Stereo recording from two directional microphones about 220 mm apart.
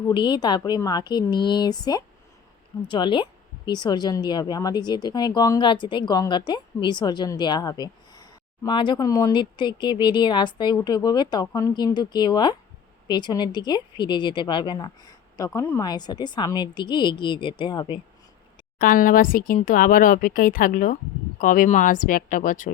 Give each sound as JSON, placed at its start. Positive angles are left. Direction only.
{"t": 0.1, "sound": "speech", "side_deg": 20}
{"t": 18.8, "sound": "speech", "side_deg": 40}